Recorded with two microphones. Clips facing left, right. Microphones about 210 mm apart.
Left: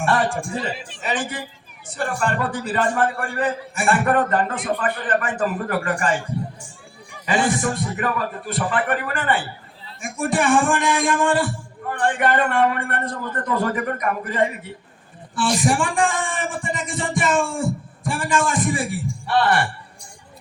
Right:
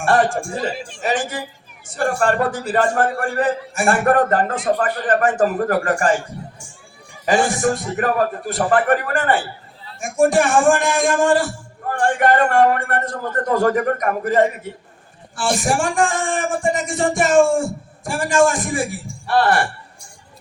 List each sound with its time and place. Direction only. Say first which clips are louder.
0.0 s speech: right 4 dB; 45° right (ahead or behind)
7.3 s speech: right 4 dB; 45° right (ahead or behind)